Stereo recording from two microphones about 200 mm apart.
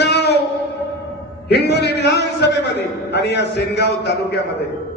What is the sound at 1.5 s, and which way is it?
A man's voice, 55° left (ahead or behind).